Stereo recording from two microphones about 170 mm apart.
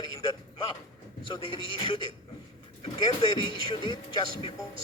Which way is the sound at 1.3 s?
30° left (ahead or behind).